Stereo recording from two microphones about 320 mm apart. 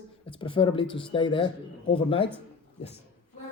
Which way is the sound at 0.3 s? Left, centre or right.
Centre.